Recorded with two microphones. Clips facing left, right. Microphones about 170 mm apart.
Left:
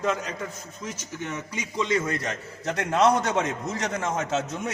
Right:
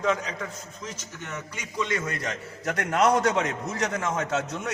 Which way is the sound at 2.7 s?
25° left (ahead or behind).